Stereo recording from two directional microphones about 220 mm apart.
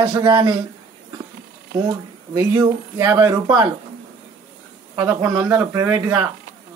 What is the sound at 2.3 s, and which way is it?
Speech, 15° right (ahead or behind).